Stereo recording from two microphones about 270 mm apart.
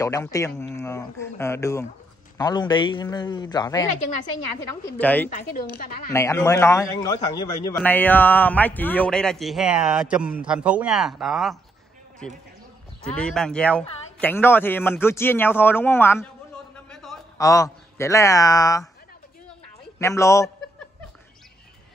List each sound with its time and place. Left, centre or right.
0.0 s speech: centre
5.3 s a woman's voice: left
6.1 s a man's voice: centre
13.0 s speech: centre
16.9 s a sound: centre
17.4 s speech: centre
20.0 s speech: centre